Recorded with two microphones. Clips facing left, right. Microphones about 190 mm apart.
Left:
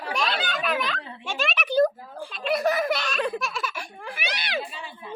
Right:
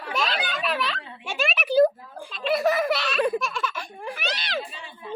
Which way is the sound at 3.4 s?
5° left (ahead or behind).